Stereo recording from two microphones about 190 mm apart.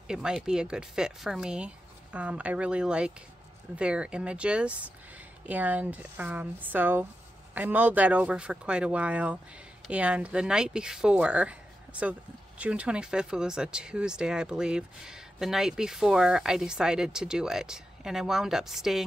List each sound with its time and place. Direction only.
0.1 s speech: 5° right (ahead or behind)